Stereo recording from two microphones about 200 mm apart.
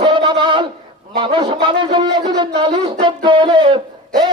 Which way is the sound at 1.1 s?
25° right (ahead or behind).